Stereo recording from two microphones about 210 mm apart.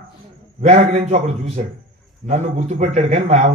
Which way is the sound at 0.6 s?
35° right (ahead or behind).